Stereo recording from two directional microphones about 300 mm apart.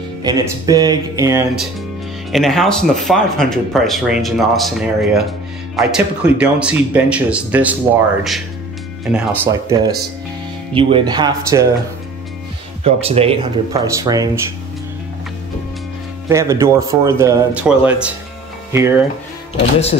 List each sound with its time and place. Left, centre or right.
0.2 s speech: centre
10.7 s speech: centre
12.8 s speech: centre
16.3 s speech: centre